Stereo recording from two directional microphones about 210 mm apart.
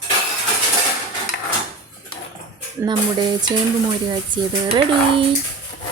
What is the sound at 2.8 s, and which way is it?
Speech, 20° right (ahead or behind).